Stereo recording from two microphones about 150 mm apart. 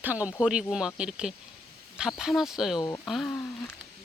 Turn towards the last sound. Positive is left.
turn(degrees=5)  # may be behind; listen again after turning